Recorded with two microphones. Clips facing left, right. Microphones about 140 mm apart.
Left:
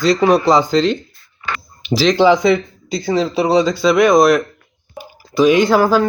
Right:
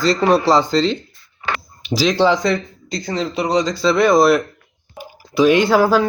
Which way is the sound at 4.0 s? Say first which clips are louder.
Left 1 dB; centre (ahead or behind).